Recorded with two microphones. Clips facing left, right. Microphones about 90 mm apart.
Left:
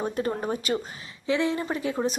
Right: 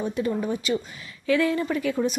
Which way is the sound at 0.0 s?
45° left (ahead or behind).